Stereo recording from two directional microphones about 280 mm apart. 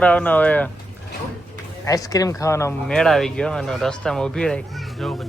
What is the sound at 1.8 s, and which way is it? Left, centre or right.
Speech, centre.